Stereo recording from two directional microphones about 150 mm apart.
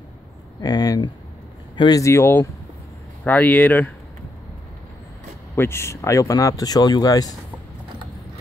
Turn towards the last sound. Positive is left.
turn(degrees=25)  # may be behind; listen again after turning